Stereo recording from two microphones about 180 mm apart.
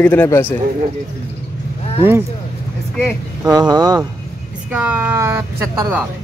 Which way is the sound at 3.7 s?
20° right (ahead or behind).